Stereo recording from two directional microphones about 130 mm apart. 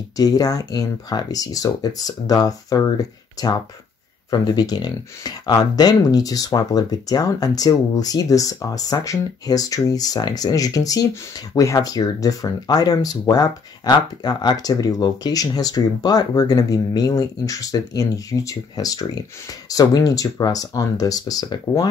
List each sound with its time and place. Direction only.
0.2 s speech: 30° left (ahead or behind)